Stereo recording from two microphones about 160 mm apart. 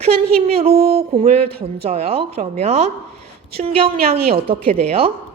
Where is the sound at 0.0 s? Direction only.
40° right (ahead or behind).